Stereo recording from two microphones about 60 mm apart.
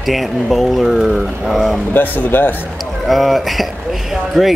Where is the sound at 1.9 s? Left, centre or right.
Left.